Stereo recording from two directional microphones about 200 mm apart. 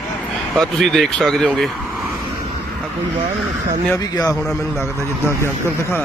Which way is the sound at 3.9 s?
15° left (ahead or behind).